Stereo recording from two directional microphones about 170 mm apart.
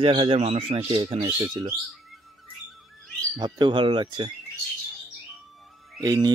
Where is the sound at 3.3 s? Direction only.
25° right (ahead or behind).